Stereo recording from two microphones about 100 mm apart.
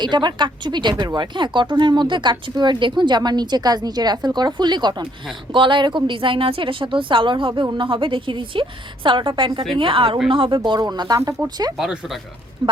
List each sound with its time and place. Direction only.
0.0 s a woman's voice: 50° right (ahead or behind)
11.2 s speech: 25° right (ahead or behind)
12.6 s speech: 50° right (ahead or behind)